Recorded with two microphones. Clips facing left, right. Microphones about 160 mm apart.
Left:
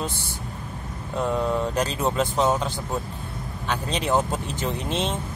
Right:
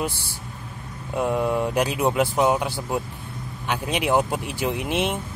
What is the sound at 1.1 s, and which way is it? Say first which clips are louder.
Speech: right 2 dB; 10° right (ahead or behind).